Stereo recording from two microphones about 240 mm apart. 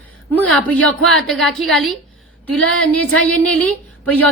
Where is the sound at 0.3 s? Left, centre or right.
Centre.